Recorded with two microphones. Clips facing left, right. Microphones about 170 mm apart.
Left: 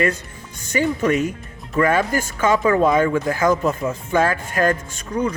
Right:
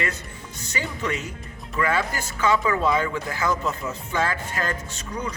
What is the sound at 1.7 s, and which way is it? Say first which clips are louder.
Speech: left 7 dB; 40° left (ahead or behind).